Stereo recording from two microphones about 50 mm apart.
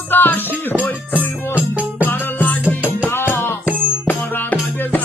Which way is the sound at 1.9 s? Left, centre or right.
Left.